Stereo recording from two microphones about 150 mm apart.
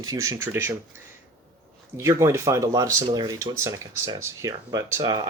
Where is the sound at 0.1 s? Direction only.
20° right (ahead or behind).